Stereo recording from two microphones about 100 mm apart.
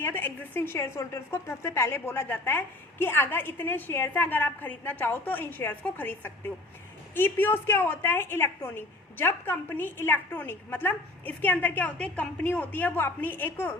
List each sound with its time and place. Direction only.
0.0 s a woman's voice: 20° left (ahead or behind)